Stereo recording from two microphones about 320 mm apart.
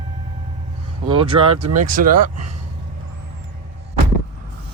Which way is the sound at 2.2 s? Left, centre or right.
Right.